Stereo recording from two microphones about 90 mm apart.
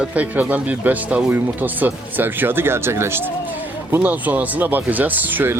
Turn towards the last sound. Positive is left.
turn(degrees=-20)  # may be behind; listen again after turning